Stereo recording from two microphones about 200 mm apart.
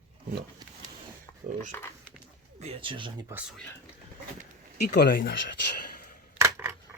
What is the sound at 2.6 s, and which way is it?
Speech, 30° right (ahead or behind).